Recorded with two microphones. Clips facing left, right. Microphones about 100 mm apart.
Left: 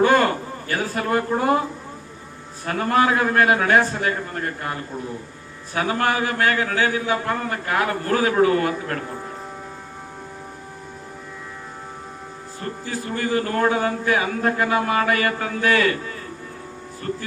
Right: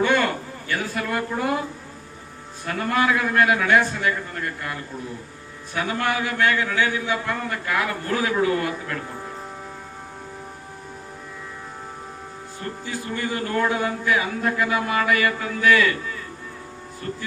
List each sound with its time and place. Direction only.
0.0 s a sound: 40° left (ahead or behind)
0.7 s a man's voice: 40° left (ahead or behind)
2.6 s a man's voice: 40° left (ahead or behind)
12.8 s a man's voice: 40° left (ahead or behind)